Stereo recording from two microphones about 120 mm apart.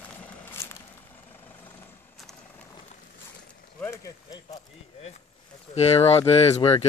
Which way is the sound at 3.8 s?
25° left (ahead or behind).